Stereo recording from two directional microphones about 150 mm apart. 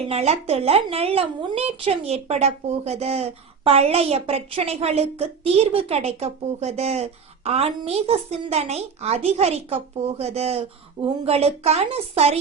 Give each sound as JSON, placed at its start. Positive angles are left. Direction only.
{"t": 0.1, "sound": "a woman's voice", "side_deg": -45}